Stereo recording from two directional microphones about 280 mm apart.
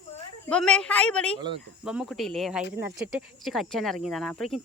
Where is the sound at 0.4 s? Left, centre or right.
Centre.